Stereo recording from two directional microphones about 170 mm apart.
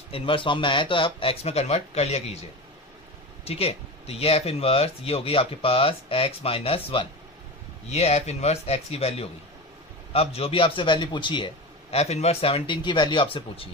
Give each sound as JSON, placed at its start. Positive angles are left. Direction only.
{"t": 0.1, "sound": "speech", "side_deg": 30}
{"t": 3.4, "sound": "speech", "side_deg": 35}